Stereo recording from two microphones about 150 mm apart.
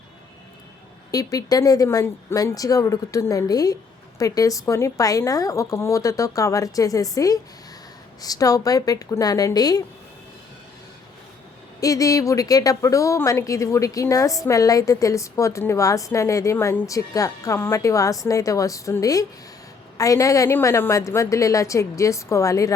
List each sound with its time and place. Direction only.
1.1 s a woman's voice: 25° left (ahead or behind)
11.8 s a woman's voice: 20° left (ahead or behind)